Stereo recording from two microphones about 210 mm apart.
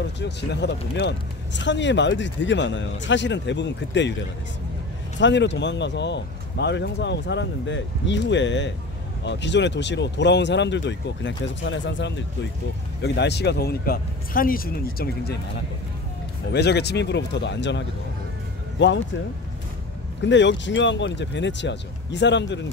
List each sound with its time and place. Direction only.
0.2 s speech: 55° left (ahead or behind)
5.2 s speech: 55° left (ahead or behind)
16.5 s speech: 50° left (ahead or behind)
20.2 s speech: 60° left (ahead or behind)